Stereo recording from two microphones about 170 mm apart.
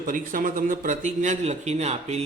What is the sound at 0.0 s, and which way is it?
A man's voice, 50° right (ahead or behind).